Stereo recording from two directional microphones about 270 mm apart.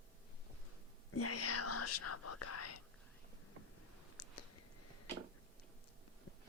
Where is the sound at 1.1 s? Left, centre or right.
Left.